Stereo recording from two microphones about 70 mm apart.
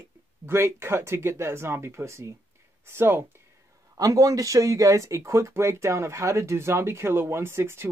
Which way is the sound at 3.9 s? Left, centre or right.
Right.